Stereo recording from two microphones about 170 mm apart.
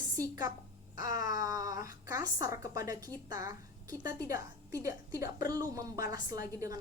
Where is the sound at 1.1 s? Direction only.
20° right (ahead or behind).